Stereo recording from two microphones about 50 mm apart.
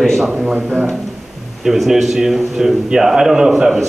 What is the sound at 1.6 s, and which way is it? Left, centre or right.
A man's voice, centre.